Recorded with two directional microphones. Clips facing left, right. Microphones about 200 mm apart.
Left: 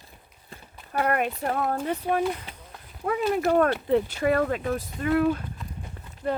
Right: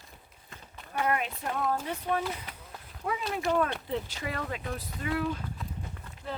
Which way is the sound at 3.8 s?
55° left (ahead or behind).